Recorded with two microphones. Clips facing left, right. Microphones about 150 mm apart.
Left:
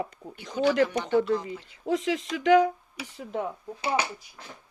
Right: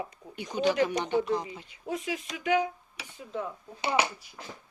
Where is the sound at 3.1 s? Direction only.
65° left (ahead or behind).